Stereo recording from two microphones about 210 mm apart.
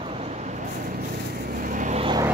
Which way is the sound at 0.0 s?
30° right (ahead or behind).